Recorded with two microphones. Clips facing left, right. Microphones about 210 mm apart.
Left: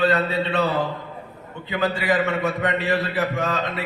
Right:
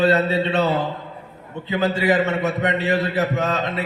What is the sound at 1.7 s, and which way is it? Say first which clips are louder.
A man's voice: right 3 dB; 20° right (ahead or behind).